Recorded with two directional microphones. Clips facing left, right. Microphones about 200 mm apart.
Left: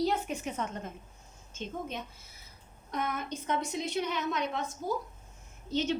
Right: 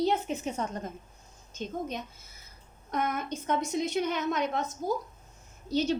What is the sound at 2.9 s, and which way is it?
A woman's voice, 45° right (ahead or behind).